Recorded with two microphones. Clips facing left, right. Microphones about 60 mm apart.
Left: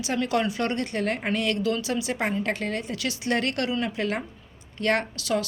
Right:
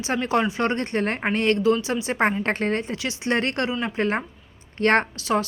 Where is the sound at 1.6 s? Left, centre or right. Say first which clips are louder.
Right 5 dB; right.